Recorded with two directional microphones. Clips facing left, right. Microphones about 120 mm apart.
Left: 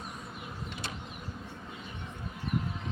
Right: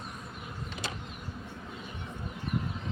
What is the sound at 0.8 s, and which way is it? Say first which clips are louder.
Vehicle: right 4 dB; 90° right.